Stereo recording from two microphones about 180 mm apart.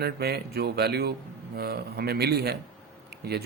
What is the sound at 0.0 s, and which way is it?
A man's voice, 65° right (ahead or behind).